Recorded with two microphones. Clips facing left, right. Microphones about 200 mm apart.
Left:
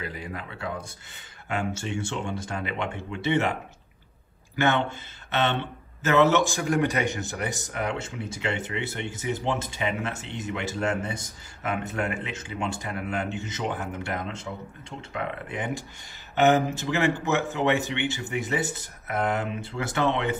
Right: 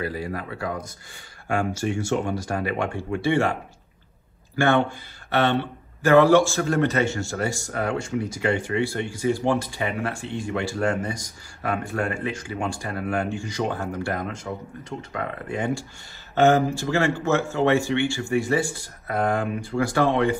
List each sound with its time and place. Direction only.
0.0 s speech: 20° left (ahead or behind)
4.6 s speech: 20° left (ahead or behind)